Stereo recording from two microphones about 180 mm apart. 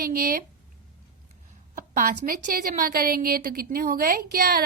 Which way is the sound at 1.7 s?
45° right (ahead or behind).